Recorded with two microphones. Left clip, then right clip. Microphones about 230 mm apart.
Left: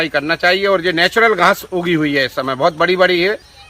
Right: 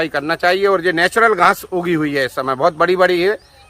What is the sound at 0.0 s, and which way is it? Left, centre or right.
Speech, right.